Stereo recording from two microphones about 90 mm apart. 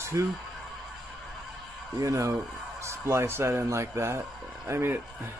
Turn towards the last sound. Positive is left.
turn(degrees=-30)  # may be behind; listen again after turning